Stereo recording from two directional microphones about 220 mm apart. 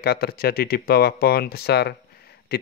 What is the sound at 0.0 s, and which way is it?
Speech, 45° left (ahead or behind).